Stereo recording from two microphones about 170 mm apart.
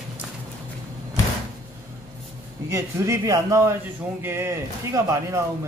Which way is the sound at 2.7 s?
20° right (ahead or behind).